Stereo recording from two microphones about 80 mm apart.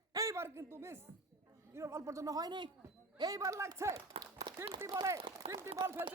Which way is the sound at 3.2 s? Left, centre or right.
Right.